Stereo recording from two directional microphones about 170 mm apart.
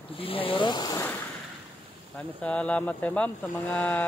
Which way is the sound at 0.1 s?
30° left (ahead or behind).